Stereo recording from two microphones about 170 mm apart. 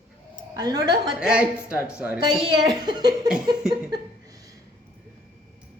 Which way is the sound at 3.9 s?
20° right (ahead or behind).